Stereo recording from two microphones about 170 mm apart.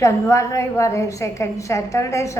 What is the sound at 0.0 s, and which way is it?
A woman's voice, 15° left (ahead or behind).